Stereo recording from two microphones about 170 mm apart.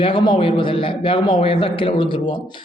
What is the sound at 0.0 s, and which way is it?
A man's voice, 30° left (ahead or behind).